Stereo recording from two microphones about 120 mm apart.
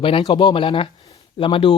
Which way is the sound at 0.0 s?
45° left (ahead or behind).